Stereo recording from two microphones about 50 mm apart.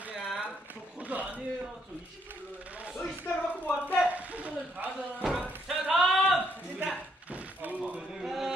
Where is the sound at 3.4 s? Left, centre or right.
Left.